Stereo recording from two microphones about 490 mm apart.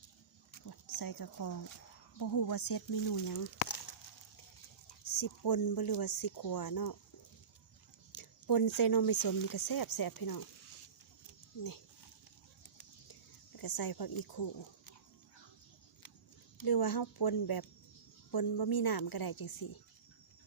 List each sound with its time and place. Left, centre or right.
0.7 s speech: left
5.1 s speech: left
8.1 s speech: left
13.6 s speech: left
16.6 s speech: left